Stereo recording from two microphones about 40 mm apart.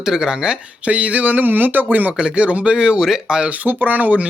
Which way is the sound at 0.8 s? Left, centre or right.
Right.